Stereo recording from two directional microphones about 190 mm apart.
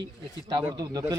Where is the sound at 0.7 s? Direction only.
20° right (ahead or behind).